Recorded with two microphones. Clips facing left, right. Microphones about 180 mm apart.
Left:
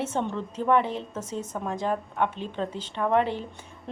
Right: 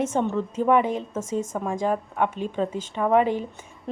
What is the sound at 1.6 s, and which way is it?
A woman's voice, 10° right (ahead or behind).